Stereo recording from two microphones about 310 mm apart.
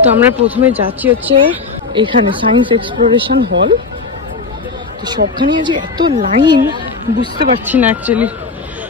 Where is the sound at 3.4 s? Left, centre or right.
Right.